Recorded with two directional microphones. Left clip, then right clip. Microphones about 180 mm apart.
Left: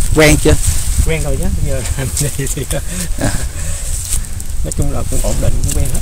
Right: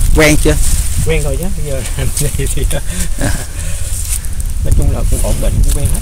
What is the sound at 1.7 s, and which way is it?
Speech, 5° right (ahead or behind).